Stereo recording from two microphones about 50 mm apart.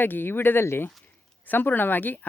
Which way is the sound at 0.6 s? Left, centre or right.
Left.